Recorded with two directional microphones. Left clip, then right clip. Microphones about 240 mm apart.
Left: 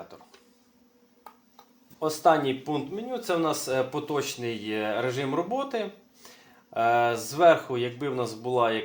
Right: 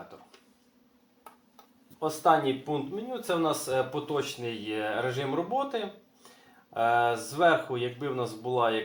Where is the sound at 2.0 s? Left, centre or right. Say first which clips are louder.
Left 2 dB; left.